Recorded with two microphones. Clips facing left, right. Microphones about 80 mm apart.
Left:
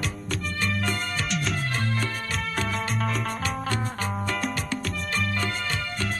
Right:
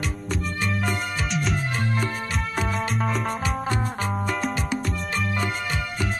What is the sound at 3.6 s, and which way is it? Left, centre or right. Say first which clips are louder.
Music: right 2 dB; centre.